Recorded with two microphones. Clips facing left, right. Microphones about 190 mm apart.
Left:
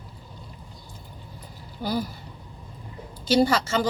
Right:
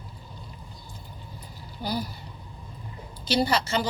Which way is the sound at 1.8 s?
50° left (ahead or behind).